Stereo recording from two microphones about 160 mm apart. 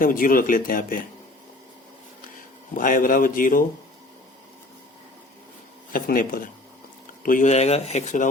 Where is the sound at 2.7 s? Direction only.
60° left (ahead or behind).